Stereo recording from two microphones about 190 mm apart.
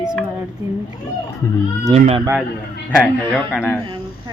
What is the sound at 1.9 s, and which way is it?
Speech, 30° right (ahead or behind).